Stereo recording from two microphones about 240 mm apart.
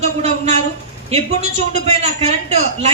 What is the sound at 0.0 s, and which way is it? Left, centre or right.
A man's voice, right.